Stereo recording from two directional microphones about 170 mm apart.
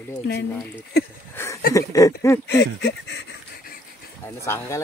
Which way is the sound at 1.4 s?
15° left (ahead or behind).